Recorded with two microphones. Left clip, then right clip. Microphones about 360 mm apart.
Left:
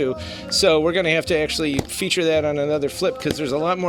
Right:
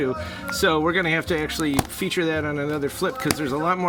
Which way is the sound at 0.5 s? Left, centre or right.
Centre.